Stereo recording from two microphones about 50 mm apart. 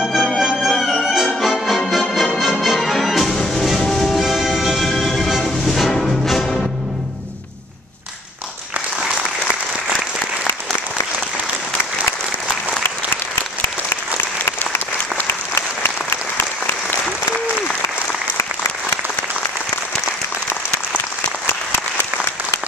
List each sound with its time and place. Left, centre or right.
0.0 s music: centre
15.1 s applause: left
18.4 s applause: left
21.5 s applause: left